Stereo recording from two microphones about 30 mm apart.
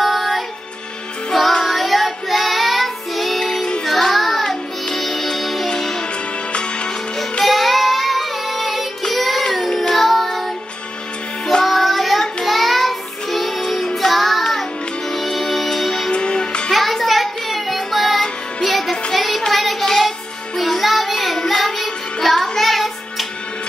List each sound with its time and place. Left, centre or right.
0.0 s music: centre
1.6 s child singing: centre
3.3 s child singing: centre
3.8 s music: centre
5.8 s music: centre
7.4 s child singing: centre
11.6 s child singing: centre
13.9 s music: centre
16.1 s music: left
16.7 s child singing: centre
18.6 s music: centre
19.5 s child singing: centre
19.8 s music: centre
20.5 s music: centre